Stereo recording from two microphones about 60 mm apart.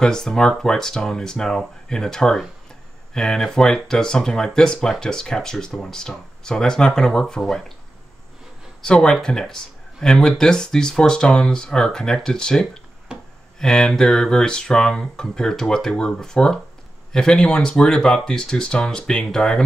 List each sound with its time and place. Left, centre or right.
0.0 s speech: centre
8.8 s speech: centre
13.1 s a sound: centre
13.6 s speech: centre